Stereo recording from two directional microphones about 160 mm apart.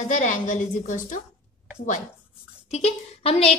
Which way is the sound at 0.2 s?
50° left (ahead or behind).